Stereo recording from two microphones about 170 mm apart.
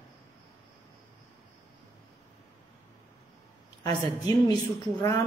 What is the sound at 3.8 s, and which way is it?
Speech, 20° left (ahead or behind).